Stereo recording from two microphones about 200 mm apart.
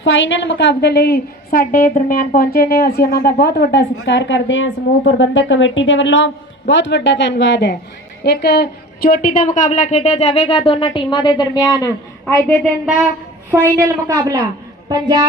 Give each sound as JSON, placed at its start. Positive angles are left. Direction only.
{"t": 0.0, "sound": "a woman's voice", "side_deg": 70}
{"t": 13.5, "sound": "a woman's voice", "side_deg": -10}